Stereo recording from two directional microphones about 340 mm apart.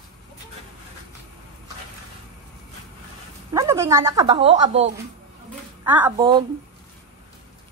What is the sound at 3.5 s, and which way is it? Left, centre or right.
Speech, centre.